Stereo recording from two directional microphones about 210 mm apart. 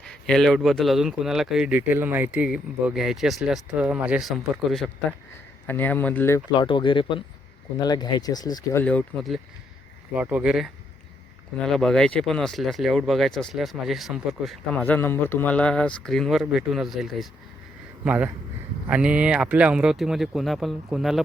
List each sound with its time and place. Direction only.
0.3 s speech: centre (ahead or behind); by 8.8 s 20° left (ahead or behind)
8.8 s speech: 5° left (ahead or behind)